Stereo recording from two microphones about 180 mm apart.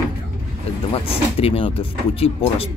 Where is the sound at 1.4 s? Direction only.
30° left (ahead or behind).